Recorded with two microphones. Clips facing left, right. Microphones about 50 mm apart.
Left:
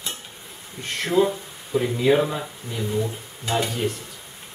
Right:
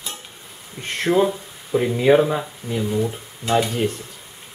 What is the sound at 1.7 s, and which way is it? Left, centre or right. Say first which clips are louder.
Speech: right 4 dB; right.